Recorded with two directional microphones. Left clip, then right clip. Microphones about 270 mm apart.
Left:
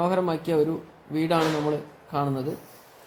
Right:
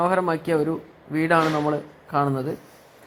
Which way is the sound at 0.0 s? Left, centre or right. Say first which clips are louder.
Right 3 dB; centre.